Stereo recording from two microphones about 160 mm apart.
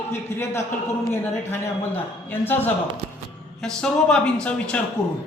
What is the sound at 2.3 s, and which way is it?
Speech, 10° left (ahead or behind).